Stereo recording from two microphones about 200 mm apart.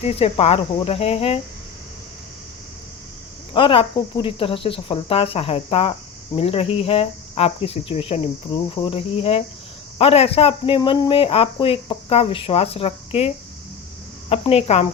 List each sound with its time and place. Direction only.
0.0 s speech: 30° left (ahead or behind)
3.5 s speech: 25° left (ahead or behind)